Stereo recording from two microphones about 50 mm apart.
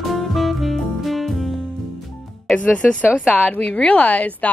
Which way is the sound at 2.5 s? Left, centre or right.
Left.